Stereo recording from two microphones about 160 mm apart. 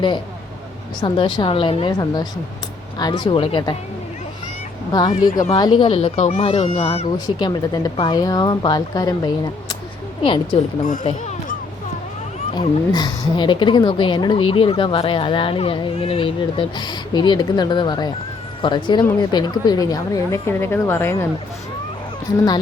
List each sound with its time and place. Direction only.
1.0 s a woman's voice: 30° left (ahead or behind)
4.9 s a woman's voice: 25° left (ahead or behind)
7.4 s a woman's voice: 25° left (ahead or behind)
10.8 s speech: 55° left (ahead or behind)
12.5 s a woman's voice: 25° left (ahead or behind)
22.3 s a woman's voice: 20° left (ahead or behind)